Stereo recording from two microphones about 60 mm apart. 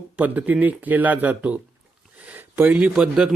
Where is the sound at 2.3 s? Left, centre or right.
Right.